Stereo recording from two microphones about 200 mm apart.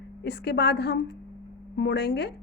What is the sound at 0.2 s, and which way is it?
A woman's voice, 55° left (ahead or behind).